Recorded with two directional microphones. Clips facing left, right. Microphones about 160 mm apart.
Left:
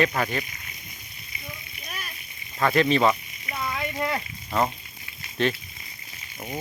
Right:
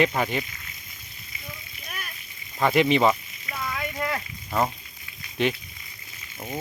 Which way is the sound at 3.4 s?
20° left (ahead or behind).